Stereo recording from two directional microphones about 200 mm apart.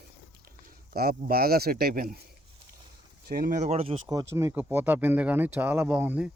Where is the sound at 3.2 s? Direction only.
45° right (ahead or behind).